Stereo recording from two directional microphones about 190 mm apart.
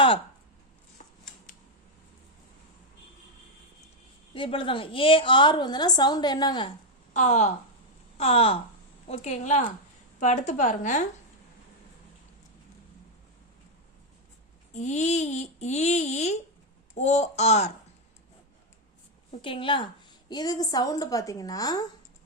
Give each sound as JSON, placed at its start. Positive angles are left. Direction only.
{"t": 4.4, "sound": "a woman's voice", "side_deg": 25}
{"t": 7.1, "sound": "speech", "side_deg": 40}
{"t": 14.7, "sound": "speech", "side_deg": 40}
{"t": 19.4, "sound": "a woman's voice", "side_deg": 25}